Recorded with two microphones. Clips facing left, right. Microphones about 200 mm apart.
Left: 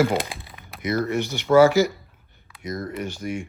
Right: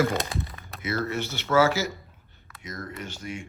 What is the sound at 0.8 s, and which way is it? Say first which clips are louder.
Speech: left 5 dB; 15° left (ahead or behind).